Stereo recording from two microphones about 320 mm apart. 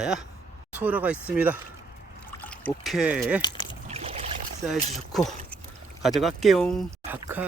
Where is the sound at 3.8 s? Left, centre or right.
Centre.